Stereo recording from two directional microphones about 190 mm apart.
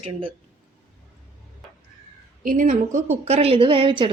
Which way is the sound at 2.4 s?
45° right (ahead or behind).